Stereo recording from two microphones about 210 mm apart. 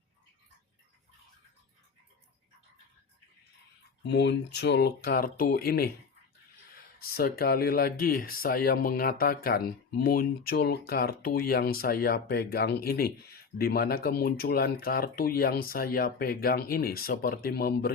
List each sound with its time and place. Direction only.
4.0 s speech: 55° left (ahead or behind)
7.0 s speech: 45° left (ahead or behind)